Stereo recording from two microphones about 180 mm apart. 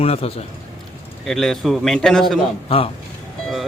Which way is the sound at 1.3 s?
Centre (ahead or behind).